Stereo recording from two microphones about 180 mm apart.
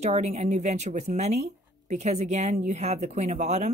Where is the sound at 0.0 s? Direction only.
40° right (ahead or behind).